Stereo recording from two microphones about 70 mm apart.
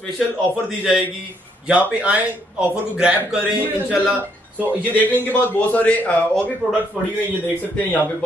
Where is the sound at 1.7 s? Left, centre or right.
Centre.